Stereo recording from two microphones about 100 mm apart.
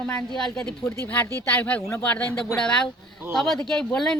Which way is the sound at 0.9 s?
20° left (ahead or behind).